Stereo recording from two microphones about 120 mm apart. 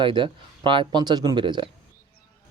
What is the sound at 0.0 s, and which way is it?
Speech, 45° right (ahead or behind).